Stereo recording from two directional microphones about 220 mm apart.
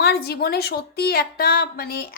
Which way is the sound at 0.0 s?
45° left (ahead or behind).